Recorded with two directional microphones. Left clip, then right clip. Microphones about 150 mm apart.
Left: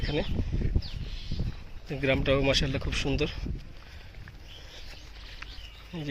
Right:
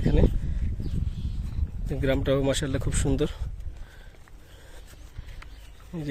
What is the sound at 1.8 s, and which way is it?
Speech, 35° right (ahead or behind).